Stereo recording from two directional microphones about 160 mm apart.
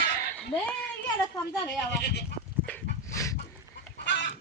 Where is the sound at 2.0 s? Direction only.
90° left.